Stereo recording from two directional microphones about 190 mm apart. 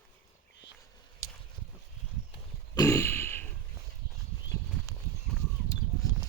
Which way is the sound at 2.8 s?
15° left (ahead or behind).